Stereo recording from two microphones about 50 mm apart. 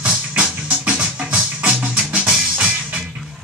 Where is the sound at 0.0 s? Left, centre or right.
Right.